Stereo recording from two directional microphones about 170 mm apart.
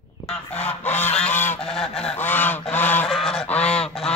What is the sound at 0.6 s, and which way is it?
Goose, 10° left (ahead or behind).